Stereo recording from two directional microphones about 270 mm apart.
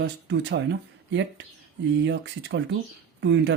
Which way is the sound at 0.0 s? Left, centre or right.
Right.